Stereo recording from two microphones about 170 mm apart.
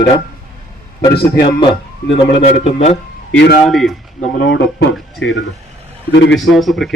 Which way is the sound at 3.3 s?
85° left.